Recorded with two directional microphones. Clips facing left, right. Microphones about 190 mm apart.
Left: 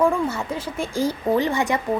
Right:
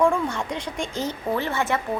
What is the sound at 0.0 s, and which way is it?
A woman's voice, 5° left (ahead or behind).